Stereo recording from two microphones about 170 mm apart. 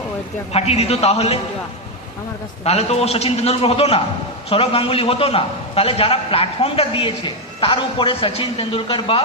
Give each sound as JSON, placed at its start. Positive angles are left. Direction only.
{"t": 0.5, "sound": "a man's voice", "side_deg": 35}
{"t": 2.6, "sound": "a man's voice", "side_deg": 40}